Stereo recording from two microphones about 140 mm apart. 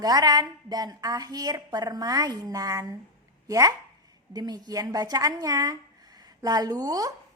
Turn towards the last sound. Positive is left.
turn(degrees=-25)  # may be behind; listen again after turning